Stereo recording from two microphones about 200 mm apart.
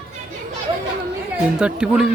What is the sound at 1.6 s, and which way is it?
Speech, 5° right (ahead or behind).